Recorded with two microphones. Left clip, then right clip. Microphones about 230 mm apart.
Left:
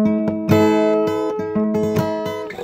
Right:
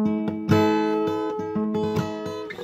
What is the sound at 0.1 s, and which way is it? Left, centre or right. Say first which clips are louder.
Music: left 6 dB; left.